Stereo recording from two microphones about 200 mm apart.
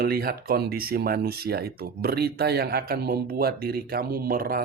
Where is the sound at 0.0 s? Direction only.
50° right (ahead or behind).